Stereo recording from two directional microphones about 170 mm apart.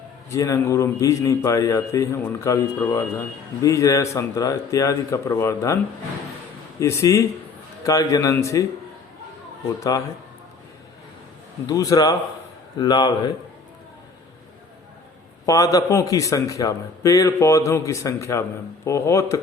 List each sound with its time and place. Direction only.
0.3 s a man's voice: 15° left (ahead or behind)
11.6 s a man's voice: 20° left (ahead or behind)
15.4 s a man's voice: 20° left (ahead or behind)